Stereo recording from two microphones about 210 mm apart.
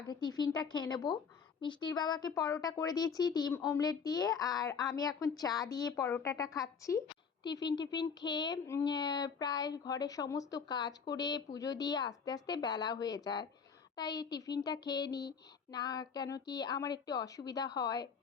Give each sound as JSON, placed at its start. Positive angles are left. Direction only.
{"t": 0.1, "sound": "speech", "side_deg": 20}